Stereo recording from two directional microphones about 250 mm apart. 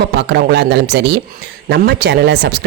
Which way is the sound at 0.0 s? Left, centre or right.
Right.